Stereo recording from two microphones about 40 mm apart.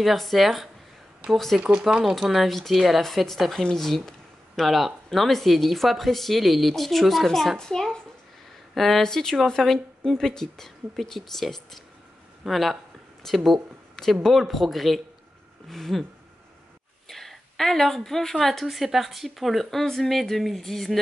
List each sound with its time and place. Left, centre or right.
0.0 s a woman's voice: centre
1.6 s speech: right
2.1 s a woman's voice: centre
8.7 s speech: centre
9.0 s a woman's voice: centre
17.1 s a woman's voice: centre